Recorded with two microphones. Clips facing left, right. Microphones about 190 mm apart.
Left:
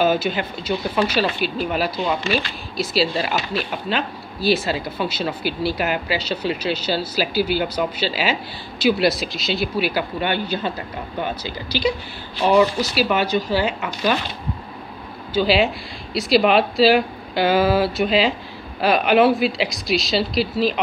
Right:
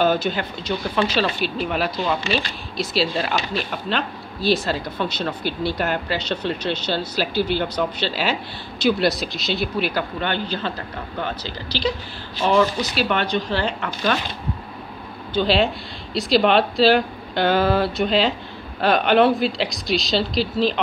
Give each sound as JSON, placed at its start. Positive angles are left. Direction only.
{"t": 0.0, "sound": "speech", "side_deg": 5}
{"t": 15.3, "sound": "speech", "side_deg": 5}